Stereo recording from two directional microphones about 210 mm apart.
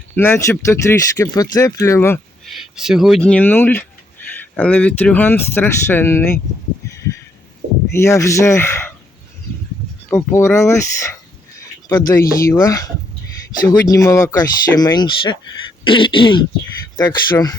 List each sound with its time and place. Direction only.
0.2 s speech: 10° left (ahead or behind)
2.7 s speech: centre (ahead or behind)
7.9 s speech: 15° left (ahead or behind)
10.1 s speech: 10° left (ahead or behind)
15.8 s throat clearing: 25° left (ahead or behind)
17.0 s speech: 20° left (ahead or behind)